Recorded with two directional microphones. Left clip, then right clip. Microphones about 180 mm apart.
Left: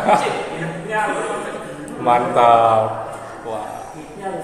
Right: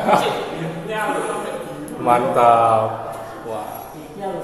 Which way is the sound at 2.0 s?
Centre (ahead or behind).